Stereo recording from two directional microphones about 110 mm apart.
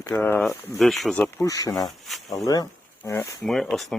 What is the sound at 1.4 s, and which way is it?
Speech, 30° left (ahead or behind).